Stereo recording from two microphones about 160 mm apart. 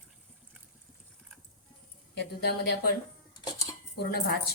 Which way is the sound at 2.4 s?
75° left (ahead or behind).